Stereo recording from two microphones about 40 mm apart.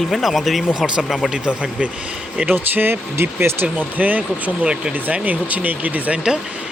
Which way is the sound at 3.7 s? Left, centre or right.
Right.